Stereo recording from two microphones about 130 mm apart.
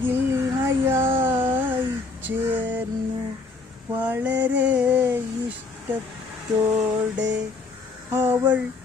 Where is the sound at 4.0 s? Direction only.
15° right (ahead or behind).